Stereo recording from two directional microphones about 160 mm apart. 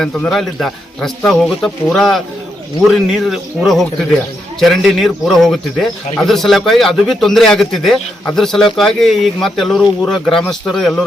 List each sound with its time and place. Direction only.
0.0 s speech: 5° left (ahead or behind)